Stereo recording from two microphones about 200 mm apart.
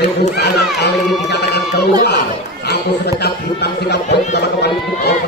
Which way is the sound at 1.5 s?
55° left (ahead or behind).